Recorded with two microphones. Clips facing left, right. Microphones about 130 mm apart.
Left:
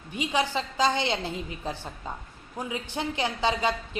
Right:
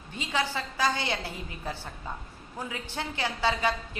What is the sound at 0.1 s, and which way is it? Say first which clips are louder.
A woman's voice: left 4 dB; 15° left (ahead or behind).